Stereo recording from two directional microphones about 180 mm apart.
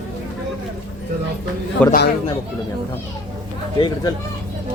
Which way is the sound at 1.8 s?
5° left (ahead or behind).